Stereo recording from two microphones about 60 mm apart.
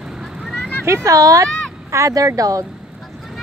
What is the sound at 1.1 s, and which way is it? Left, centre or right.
Speech, right.